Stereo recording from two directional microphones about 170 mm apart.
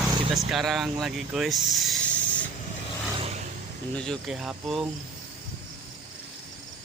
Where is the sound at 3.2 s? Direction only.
40° right (ahead or behind).